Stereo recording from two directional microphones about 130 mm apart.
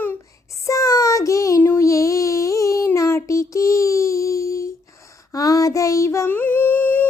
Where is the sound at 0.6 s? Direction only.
25° left (ahead or behind).